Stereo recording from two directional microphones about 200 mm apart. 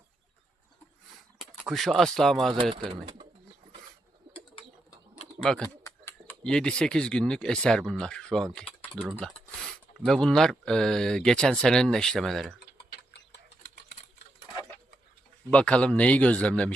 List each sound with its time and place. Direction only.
1.1 s a sound: centre (ahead or behind)
2.8 s speech: 30° right (ahead or behind)
5.4 s speech: 5° left (ahead or behind)
15.4 s speech: 5° left (ahead or behind)